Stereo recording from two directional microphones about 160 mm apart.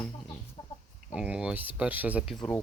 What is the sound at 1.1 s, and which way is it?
Speech, 5° right (ahead or behind).